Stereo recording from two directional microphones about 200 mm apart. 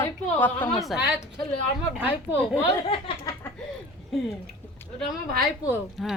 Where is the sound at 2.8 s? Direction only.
25° left (ahead or behind).